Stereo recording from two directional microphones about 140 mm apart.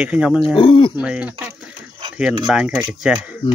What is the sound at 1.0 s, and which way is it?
Speech, 10° right (ahead or behind).